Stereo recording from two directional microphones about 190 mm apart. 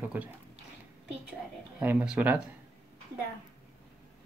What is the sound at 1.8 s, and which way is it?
Speech, 10° right (ahead or behind).